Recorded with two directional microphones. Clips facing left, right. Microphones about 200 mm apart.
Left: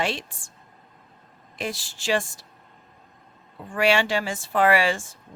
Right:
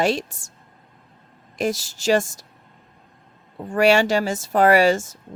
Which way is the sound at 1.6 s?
40° right (ahead or behind).